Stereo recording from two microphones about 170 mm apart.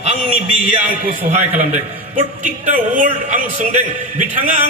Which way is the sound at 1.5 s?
45° right (ahead or behind).